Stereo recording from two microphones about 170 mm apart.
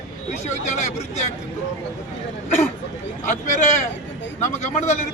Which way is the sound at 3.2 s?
45° left (ahead or behind).